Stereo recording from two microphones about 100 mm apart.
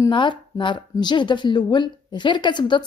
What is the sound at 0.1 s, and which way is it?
Speech, 50° left (ahead or behind).